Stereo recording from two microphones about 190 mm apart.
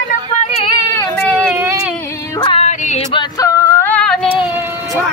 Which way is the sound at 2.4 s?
30° left (ahead or behind).